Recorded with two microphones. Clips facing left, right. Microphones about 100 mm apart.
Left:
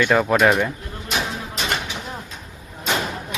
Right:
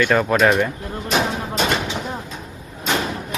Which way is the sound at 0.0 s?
10° left (ahead or behind).